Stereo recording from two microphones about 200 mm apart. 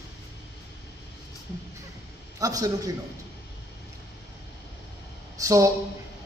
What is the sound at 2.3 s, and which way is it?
Speech, 15° right (ahead or behind).